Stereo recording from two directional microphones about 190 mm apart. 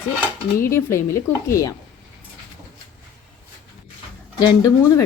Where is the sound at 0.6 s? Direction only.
15° left (ahead or behind).